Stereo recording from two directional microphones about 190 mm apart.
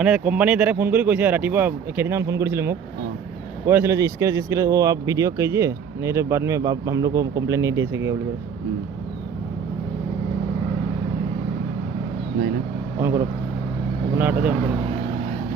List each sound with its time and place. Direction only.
0.0 s speech: 5° right (ahead or behind)
13.0 s speech: 15° right (ahead or behind)